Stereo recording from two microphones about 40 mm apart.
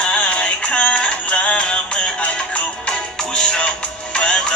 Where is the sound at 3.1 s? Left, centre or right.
Centre.